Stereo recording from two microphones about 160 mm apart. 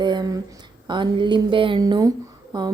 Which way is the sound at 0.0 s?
25° right (ahead or behind).